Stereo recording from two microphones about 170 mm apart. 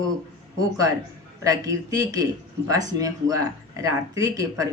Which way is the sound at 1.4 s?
20° right (ahead or behind).